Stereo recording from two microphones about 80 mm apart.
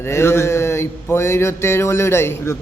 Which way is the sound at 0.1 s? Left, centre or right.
Left.